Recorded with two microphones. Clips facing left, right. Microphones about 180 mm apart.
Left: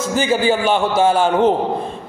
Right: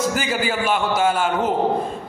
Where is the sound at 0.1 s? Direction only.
25° left (ahead or behind).